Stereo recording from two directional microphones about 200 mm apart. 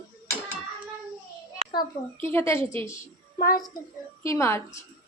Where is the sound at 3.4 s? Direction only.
45° left (ahead or behind).